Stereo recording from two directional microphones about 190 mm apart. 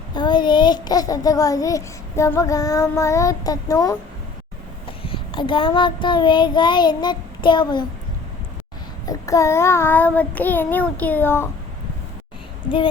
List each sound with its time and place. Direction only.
0.1 s a child's voice: 25° left (ahead or behind)
4.9 s child singing: 30° left (ahead or behind)
9.0 s a child's voice: 15° left (ahead or behind)